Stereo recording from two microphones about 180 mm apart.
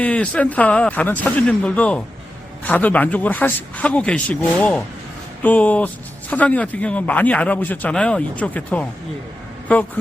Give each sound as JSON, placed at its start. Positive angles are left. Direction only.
{"t": 0.0, "sound": "speech", "side_deg": 5}